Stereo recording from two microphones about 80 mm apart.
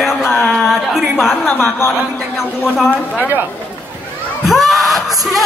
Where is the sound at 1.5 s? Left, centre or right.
Left.